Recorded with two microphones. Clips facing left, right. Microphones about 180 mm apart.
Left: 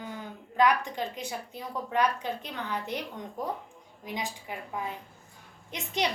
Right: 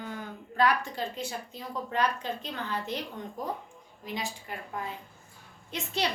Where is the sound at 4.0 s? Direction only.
15° left (ahead or behind).